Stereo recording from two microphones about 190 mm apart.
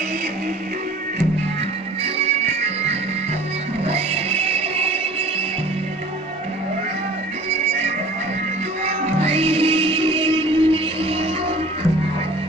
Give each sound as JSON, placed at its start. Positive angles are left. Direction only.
{"t": 2.1, "sound": "music", "side_deg": -35}
{"t": 8.8, "sound": "music", "side_deg": -30}